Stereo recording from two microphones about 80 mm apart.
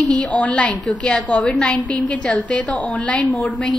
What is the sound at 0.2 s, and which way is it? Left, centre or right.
A woman's voice, centre.